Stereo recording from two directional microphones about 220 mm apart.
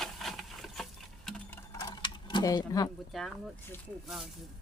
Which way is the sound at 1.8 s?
20° left (ahead or behind).